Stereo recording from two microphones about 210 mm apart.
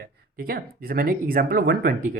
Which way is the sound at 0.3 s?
45° right (ahead or behind).